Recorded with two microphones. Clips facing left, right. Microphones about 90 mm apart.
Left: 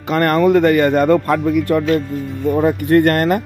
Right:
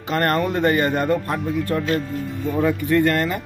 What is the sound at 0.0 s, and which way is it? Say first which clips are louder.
Speech: left 6 dB; 60° left (ahead or behind).